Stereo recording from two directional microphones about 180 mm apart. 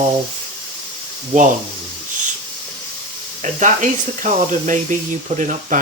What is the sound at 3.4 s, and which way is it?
Speech, 45° right (ahead or behind).